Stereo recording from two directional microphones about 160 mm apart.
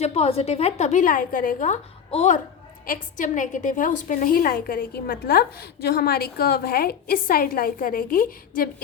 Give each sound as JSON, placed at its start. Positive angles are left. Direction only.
{"t": 0.0, "sound": "a woman's voice", "side_deg": 40}
{"t": 2.8, "sound": "a woman's voice", "side_deg": 55}